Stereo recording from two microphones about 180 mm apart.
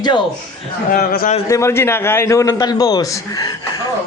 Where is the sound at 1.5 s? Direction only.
15° left (ahead or behind).